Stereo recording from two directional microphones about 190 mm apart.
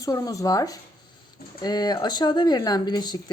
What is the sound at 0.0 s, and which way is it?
Speech, 20° left (ahead or behind).